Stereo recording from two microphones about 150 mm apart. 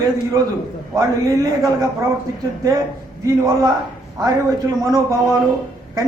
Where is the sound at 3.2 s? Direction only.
25° right (ahead or behind).